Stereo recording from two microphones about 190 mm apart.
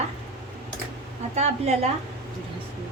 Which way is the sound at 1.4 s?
35° right (ahead or behind).